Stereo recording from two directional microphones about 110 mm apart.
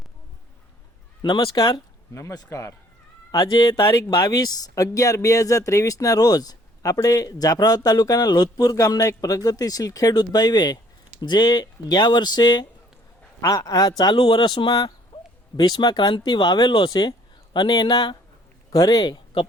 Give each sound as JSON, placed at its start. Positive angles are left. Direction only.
{"t": 1.2, "sound": "speech", "side_deg": 35}
{"t": 3.8, "sound": "speech", "side_deg": 30}